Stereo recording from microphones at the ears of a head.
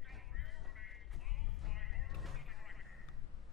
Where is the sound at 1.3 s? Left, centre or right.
Left.